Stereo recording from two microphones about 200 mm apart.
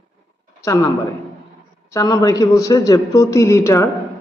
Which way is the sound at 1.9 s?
20° left (ahead or behind).